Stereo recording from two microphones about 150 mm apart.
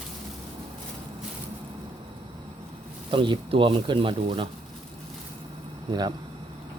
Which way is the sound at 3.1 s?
35° right (ahead or behind).